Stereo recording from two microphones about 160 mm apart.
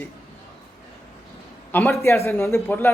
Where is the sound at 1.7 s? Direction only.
5° left (ahead or behind).